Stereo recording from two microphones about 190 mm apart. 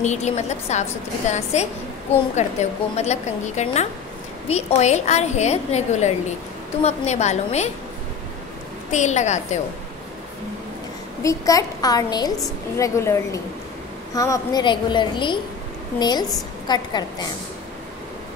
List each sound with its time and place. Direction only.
0.0 s a woman's voice: 35° left (ahead or behind)
8.9 s a woman's voice: 35° left (ahead or behind)
11.2 s a woman's voice: 20° left (ahead or behind)